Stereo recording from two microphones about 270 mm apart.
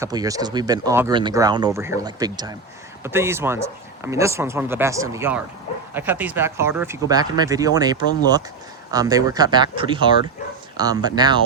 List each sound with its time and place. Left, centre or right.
0.0 s speech: centre